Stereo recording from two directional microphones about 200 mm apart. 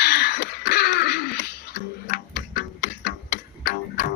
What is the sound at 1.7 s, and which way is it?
Tick-tock, 55° left (ahead or behind).